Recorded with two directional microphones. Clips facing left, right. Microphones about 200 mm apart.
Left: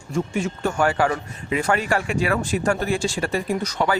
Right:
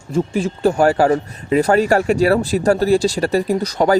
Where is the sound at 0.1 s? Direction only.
30° right (ahead or behind).